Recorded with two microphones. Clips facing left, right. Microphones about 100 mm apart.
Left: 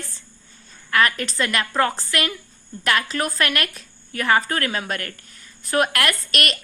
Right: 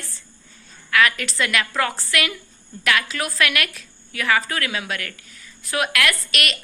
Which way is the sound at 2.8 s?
35° left (ahead or behind).